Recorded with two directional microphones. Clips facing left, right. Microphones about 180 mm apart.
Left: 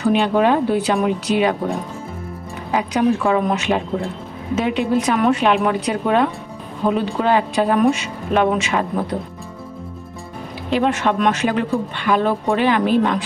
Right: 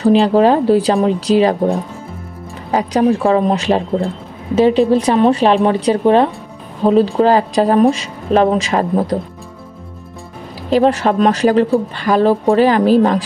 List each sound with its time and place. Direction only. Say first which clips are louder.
0.0 s speech: right 5 dB; 35° right (ahead or behind)
10.7 s speech: right 5 dB; 35° right (ahead or behind)